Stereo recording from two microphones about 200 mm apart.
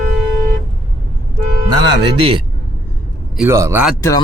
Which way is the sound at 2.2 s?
25° right (ahead or behind).